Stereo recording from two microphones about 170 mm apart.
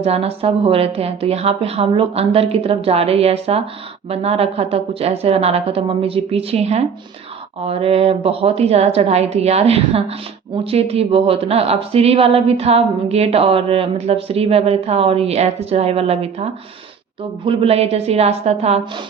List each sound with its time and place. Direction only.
0.0 s a woman's voice: 35° right (ahead or behind)